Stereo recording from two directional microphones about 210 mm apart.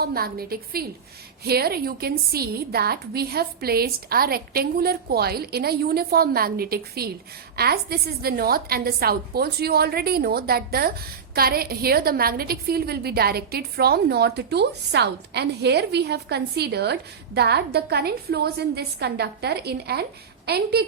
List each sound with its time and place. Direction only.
0.0 s a woman's voice: 45° right (ahead or behind)